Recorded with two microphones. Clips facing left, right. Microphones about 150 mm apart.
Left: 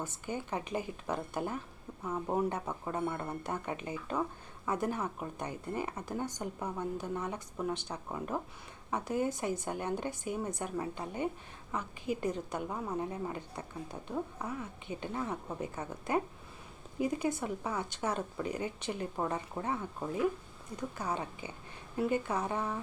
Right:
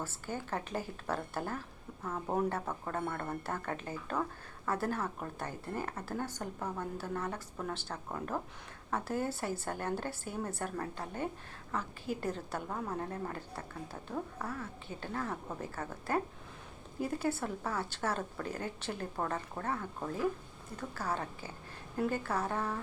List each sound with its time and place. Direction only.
0.0 s a woman's voice: 15° left (ahead or behind)